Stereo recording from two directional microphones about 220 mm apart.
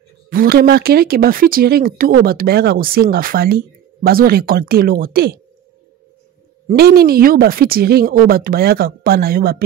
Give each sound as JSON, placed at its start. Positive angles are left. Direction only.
{"t": 0.3, "sound": "speech", "side_deg": -40}
{"t": 6.7, "sound": "speech", "side_deg": -45}